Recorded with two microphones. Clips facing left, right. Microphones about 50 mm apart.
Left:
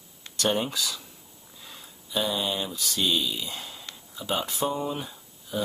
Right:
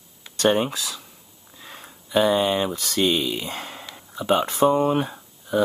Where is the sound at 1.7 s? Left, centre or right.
Right.